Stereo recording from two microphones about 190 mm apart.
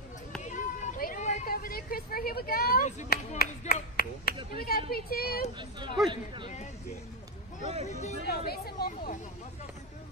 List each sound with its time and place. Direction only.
0.4 s a sound: 40° left (ahead or behind)
3.1 s a woman's voice: 55° left (ahead or behind)
5.6 s speech: 25° right (ahead or behind)
7.8 s speech: 35° left (ahead or behind)
8.3 s speech: 55° left (ahead or behind)